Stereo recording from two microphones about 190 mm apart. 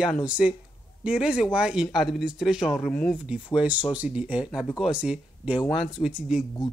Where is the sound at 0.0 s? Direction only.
5° right (ahead or behind).